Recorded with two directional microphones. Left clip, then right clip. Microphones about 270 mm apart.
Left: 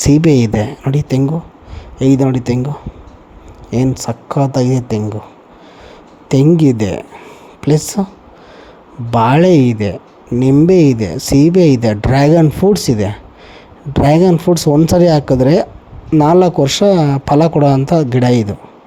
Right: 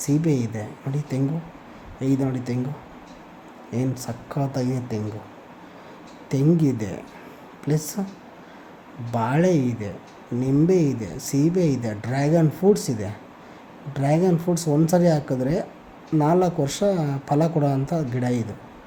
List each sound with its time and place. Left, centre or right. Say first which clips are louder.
0.0 s speech: left 13 dB; left
3.7 s speech: left 12 dB; left
6.2 s speech: left 11 dB; left
9.1 s speech: left 12 dB; left